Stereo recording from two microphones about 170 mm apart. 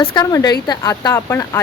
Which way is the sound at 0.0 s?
25° left (ahead or behind).